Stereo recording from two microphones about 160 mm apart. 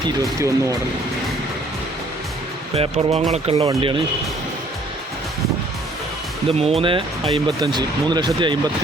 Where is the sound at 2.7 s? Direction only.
40° right (ahead or behind).